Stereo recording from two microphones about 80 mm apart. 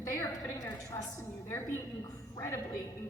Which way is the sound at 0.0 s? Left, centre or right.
Left.